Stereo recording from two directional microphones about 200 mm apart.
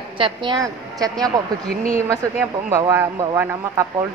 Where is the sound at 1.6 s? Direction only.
30° left (ahead or behind).